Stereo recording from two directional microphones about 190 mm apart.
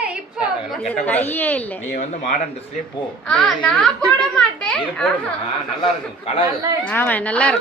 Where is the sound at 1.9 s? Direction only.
40° left (ahead or behind).